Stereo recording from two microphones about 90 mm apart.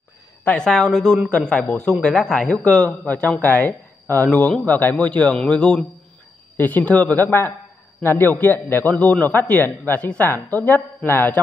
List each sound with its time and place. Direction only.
0.5 s a man's voice: 10° left (ahead or behind)
1.3 s a man's voice: 10° left (ahead or behind)